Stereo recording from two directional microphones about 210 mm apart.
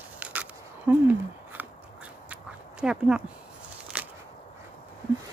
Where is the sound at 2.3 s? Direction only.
5° right (ahead or behind).